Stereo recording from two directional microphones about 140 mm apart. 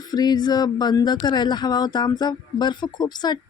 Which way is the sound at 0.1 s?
30° left (ahead or behind).